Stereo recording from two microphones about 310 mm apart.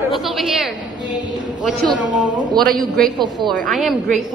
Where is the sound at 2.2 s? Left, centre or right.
Centre.